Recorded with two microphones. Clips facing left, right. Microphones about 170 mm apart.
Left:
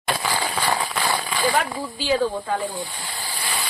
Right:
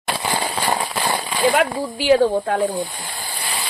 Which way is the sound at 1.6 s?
70° right (ahead or behind).